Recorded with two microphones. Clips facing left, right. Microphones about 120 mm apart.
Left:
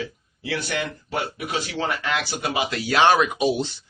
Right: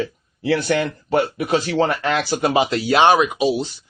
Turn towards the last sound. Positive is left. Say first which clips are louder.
# right 3 dB
turn(degrees=0)  # may be behind; listen again after turning